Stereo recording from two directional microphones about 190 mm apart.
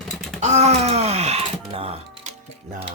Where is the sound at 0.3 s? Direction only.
35° right (ahead or behind).